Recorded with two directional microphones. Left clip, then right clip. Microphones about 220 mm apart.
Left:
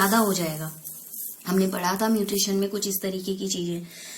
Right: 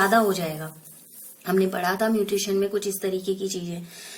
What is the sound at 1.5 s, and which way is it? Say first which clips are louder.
Speech: right 2 dB; 15° right (ahead or behind).